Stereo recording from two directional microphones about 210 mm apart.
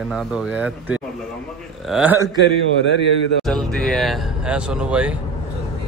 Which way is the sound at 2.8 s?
55° left (ahead or behind).